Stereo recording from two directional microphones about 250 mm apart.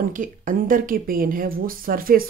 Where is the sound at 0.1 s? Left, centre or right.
Right.